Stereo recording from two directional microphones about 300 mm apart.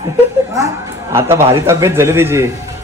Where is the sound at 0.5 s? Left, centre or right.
Centre.